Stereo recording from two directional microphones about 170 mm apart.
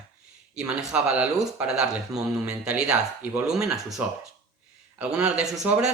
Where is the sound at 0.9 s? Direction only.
5° right (ahead or behind).